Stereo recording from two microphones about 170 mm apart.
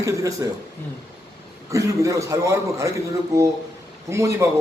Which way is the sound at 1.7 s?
20° right (ahead or behind).